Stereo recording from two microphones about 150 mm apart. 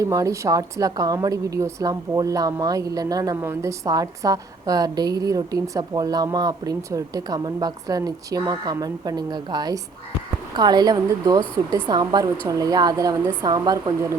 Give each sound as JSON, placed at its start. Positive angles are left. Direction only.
{"t": 0.0, "sound": "a woman's voice", "side_deg": -20}